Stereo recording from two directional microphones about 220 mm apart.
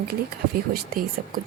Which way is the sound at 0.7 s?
40° right (ahead or behind).